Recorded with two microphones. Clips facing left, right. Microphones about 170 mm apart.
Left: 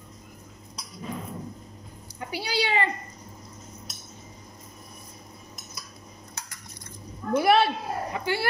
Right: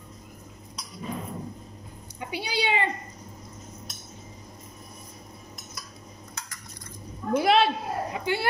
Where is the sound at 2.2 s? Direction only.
20° right (ahead or behind).